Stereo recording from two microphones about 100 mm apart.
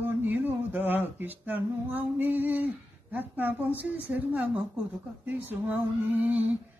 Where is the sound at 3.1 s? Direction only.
15° right (ahead or behind).